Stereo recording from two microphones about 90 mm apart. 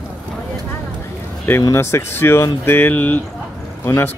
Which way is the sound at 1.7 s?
30° left (ahead or behind).